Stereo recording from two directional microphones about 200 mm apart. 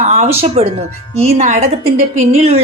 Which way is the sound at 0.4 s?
30° right (ahead or behind).